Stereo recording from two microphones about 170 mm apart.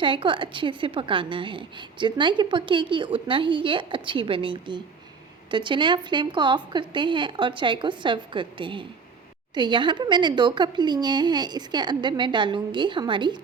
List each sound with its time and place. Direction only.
0.0 s a woman's voice: 30° right (ahead or behind)